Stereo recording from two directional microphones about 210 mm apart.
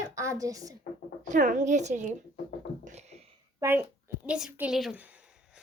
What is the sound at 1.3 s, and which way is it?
Speech, 35° right (ahead or behind).